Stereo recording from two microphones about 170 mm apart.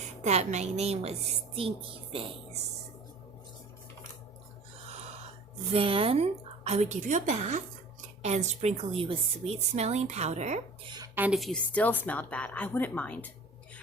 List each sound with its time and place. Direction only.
0.2 s a woman's voice: 40° right (ahead or behind)
5.7 s a woman's voice: 30° right (ahead or behind)
10.8 s a sound: 25° right (ahead or behind)
11.1 s a woman's voice: 10° right (ahead or behind)
11.3 s a woman's voice: 5° left (ahead or behind)